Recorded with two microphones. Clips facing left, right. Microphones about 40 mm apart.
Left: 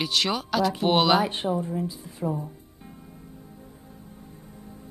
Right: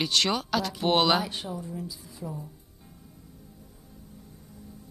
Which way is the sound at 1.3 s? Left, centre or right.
Left.